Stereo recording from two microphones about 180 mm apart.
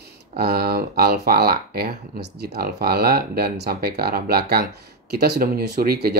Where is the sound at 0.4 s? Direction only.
60° right (ahead or behind).